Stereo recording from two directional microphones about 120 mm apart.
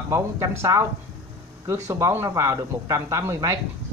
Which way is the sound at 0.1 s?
25° right (ahead or behind).